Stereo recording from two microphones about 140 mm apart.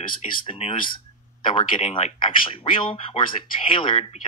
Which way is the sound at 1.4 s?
35° left (ahead or behind).